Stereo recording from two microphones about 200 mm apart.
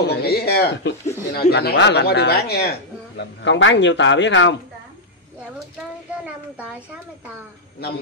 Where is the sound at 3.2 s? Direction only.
65° left (ahead or behind).